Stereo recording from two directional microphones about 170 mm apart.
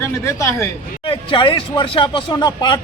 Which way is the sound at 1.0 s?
30° left (ahead or behind).